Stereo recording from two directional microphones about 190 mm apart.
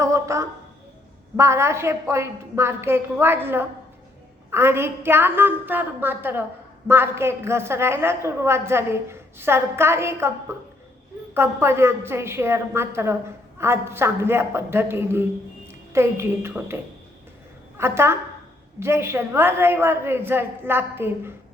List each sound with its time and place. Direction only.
0.0 s a sound: 15° right (ahead or behind)
1.4 s a man's voice: 15° right (ahead or behind)
11.3 s a man's voice: 15° right (ahead or behind)